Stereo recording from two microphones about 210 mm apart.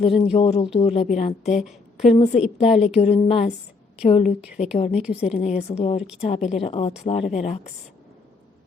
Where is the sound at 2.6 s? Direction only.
30° left (ahead or behind).